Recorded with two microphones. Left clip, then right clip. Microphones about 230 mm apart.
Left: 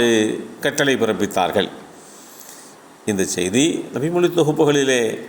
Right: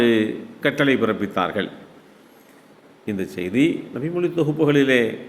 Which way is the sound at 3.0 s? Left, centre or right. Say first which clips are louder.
Left 6 dB; centre.